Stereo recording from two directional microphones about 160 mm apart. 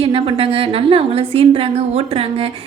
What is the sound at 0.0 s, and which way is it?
A woman's voice, 35° right (ahead or behind).